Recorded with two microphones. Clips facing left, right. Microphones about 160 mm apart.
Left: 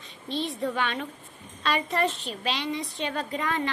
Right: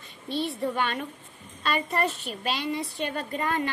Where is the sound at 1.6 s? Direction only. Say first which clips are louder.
Left 1 dB; centre (ahead or behind).